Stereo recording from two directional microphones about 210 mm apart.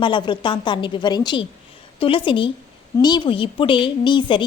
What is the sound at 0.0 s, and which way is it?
A woman's voice, 20° left (ahead or behind).